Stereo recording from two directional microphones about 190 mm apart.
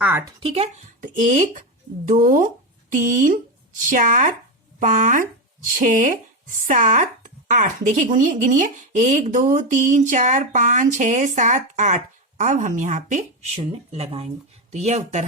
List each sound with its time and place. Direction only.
0.0 s speech: 10° right (ahead or behind)
0.3 s speech: 30° right (ahead or behind)